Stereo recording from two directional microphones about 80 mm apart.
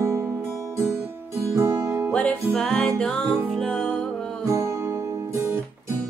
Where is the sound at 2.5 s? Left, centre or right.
Centre.